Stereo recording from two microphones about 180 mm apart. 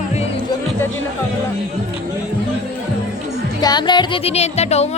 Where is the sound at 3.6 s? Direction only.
25° left (ahead or behind).